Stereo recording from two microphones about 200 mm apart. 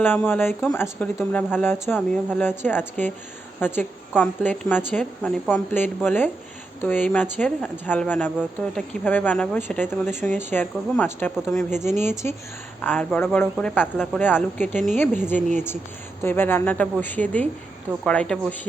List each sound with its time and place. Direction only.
0.0 s speech: 10° left (ahead or behind)
15.4 s speech: 35° right (ahead or behind)
16.2 s speech: 10° left (ahead or behind)